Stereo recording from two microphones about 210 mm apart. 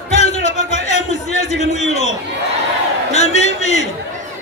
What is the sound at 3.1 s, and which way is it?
Speech, 30° left (ahead or behind).